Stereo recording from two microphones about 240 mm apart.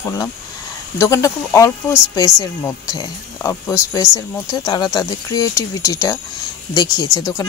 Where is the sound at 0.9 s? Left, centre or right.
Centre.